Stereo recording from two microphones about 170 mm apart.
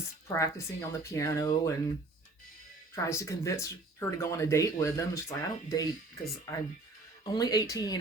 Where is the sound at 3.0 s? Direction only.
15° left (ahead or behind).